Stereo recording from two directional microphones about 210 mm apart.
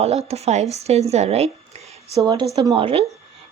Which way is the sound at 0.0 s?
30° right (ahead or behind).